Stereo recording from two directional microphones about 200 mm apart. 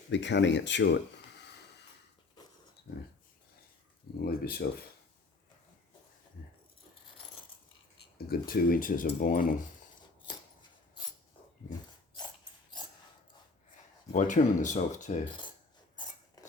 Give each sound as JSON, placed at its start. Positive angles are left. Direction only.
{"t": 0.1, "sound": "speech", "side_deg": 60}
{"t": 4.2, "sound": "speech", "side_deg": 50}
{"t": 8.3, "sound": "speech", "side_deg": 45}
{"t": 14.1, "sound": "speech", "side_deg": 40}